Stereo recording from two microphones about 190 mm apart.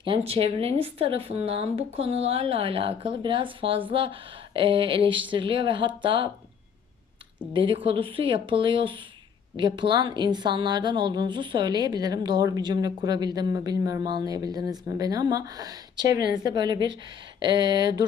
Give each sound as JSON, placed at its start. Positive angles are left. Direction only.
{"t": 0.0, "sound": "speech", "side_deg": -30}
{"t": 7.5, "sound": "speech", "side_deg": -25}